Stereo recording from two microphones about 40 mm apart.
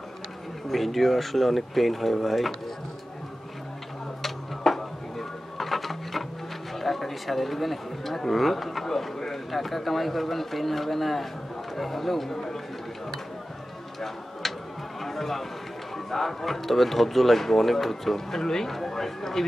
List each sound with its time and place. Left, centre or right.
0.7 s speech: centre
4.2 s a sound: centre
5.6 s sewing machine: centre
6.8 s speech: centre
14.4 s a sound: centre
15.0 s music: centre
16.1 s speech: centre